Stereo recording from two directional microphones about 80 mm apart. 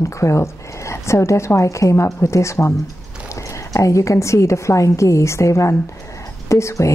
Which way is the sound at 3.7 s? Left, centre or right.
Left.